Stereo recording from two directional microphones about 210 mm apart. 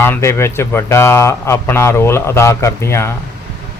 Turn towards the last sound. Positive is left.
turn(degrees=15)  # may be behind; listen again after turning